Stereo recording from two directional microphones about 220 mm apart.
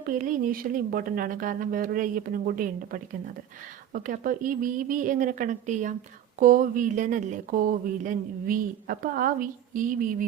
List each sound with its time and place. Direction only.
0.1 s speech: 35° right (ahead or behind)